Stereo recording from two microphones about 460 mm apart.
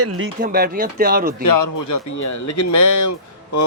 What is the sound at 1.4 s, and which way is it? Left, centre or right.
Speech, left.